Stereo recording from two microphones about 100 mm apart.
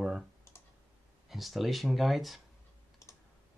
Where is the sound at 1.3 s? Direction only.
Centre (ahead or behind).